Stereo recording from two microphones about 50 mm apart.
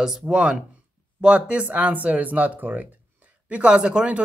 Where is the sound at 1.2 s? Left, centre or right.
Right.